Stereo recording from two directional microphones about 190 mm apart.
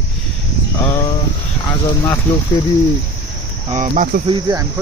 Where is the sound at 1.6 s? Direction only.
20° left (ahead or behind).